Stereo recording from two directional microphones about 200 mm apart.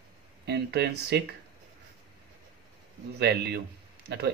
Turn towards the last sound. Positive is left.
turn(degrees=-60)  # may be behind; listen again after turning